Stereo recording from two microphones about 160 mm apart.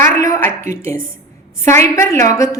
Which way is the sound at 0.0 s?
15° left (ahead or behind).